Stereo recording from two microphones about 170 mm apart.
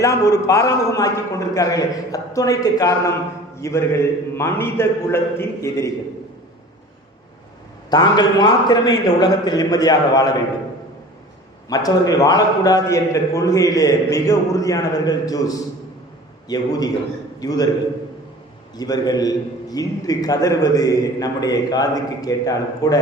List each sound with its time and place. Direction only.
0.0 s a man's voice: 20° left (ahead or behind)
7.9 s a man's voice: 25° left (ahead or behind)
11.7 s a man's voice: 20° left (ahead or behind)
18.8 s a man's voice: 25° left (ahead or behind)